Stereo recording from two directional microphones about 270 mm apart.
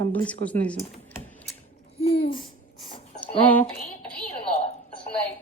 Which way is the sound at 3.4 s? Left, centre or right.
Centre.